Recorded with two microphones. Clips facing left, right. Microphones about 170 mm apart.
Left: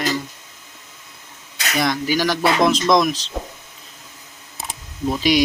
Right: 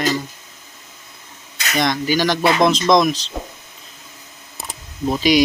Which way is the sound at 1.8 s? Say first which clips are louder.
Right 2 dB; 5° left (ahead or behind).